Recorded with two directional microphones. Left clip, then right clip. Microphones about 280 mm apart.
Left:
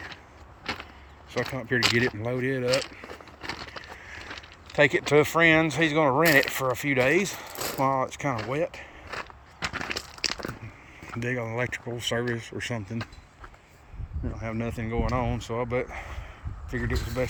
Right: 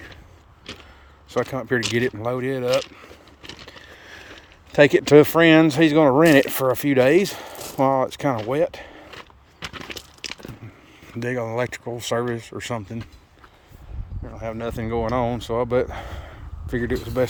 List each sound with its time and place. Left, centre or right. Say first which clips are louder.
1.3 s speech: right 5 dB; centre
4.8 s speech: right 8 dB; right
5.7 s speech: right 7 dB; right
6.0 s speech: right 5 dB; right
11.1 s speech: right 5 dB; centre
14.3 s speech: right 6 dB; right
16.2 s a sound: right 3 dB; right
17.2 s speech: right 8 dB; right